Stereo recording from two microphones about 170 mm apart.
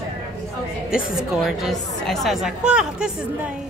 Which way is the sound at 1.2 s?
Centre (ahead or behind).